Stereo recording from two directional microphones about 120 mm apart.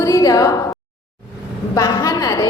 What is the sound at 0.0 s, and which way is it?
Speech, 30° left (ahead or behind).